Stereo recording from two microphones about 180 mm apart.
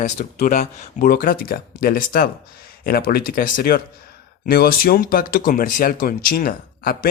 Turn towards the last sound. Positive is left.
turn(degrees=55)  # may be behind; listen again after turning